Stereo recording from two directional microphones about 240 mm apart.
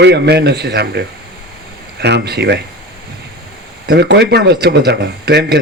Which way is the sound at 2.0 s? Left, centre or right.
Right.